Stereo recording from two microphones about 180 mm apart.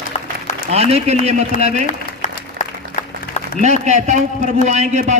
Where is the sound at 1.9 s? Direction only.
45° left (ahead or behind).